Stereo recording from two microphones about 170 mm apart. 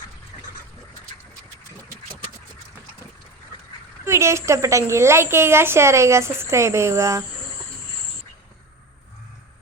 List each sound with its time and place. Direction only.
4.0 s a woman's voice: 15° right (ahead or behind)